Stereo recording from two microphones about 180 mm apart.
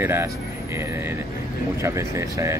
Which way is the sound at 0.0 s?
15° right (ahead or behind).